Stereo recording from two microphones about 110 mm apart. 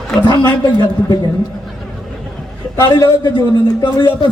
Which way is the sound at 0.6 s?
40° left (ahead or behind).